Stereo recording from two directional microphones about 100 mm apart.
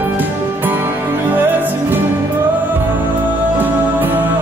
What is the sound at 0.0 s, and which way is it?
Music, 20° right (ahead or behind).